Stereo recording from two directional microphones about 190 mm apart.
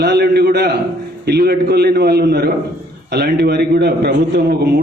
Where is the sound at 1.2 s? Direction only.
55° right (ahead or behind).